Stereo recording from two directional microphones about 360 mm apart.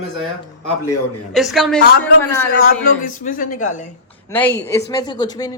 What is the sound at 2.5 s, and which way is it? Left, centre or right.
A man's voice, left.